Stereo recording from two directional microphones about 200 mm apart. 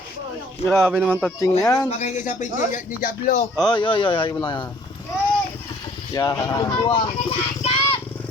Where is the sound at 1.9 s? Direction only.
35° left (ahead or behind).